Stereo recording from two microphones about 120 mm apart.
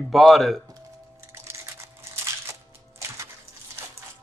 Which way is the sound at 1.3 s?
25° right (ahead or behind).